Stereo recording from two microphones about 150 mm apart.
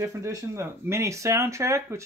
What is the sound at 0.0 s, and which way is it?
A child's voice, 20° right (ahead or behind).